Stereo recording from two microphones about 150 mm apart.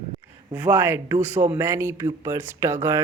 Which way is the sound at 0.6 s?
10° right (ahead or behind).